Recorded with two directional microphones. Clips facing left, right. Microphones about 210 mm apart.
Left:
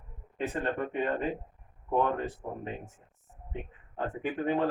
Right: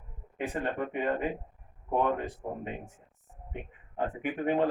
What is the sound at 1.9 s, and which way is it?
Speech, 15° right (ahead or behind).